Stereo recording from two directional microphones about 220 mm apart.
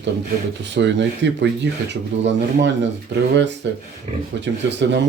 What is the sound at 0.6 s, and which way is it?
Speech, 55° right (ahead or behind).